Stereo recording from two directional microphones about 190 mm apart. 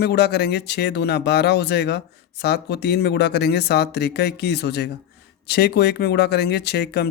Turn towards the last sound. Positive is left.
turn(degrees=60)  # may be behind; listen again after turning